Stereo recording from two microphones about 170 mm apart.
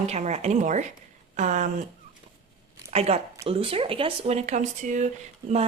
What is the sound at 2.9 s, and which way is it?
A woman's voice, 40° right (ahead or behind).